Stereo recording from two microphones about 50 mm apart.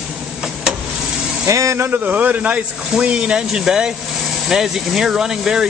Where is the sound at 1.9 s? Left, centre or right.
Right.